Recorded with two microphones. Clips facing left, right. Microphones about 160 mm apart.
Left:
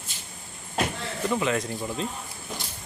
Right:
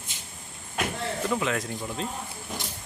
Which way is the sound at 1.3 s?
Centre (ahead or behind).